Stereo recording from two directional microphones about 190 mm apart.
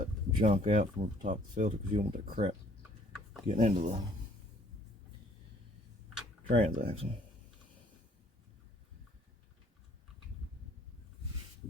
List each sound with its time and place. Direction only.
0.0 s a sound: 45° right (ahead or behind)
0.5 s speech: 40° right (ahead or behind)
2.1 s speech: 50° right (ahead or behind)
3.4 s speech: 40° right (ahead or behind)
6.5 s speech: 30° right (ahead or behind)